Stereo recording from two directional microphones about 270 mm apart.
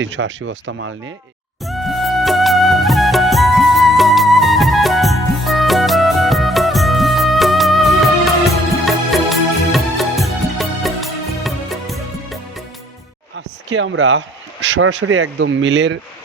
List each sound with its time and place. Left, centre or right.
0.0 s speech: right
1.6 s music: centre
13.3 s a sound: right
14.7 s speech: right